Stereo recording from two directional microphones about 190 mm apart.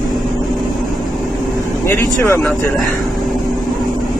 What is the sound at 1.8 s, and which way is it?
Speech, 15° left (ahead or behind).